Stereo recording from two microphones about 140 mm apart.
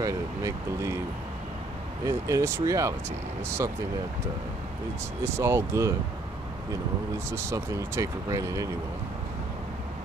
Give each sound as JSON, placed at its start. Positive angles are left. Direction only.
{"t": 0.0, "sound": "speech", "side_deg": -20}
{"t": 2.0, "sound": "speech", "side_deg": -20}
{"t": 5.2, "sound": "speech", "side_deg": -20}
{"t": 7.2, "sound": "speech", "side_deg": -20}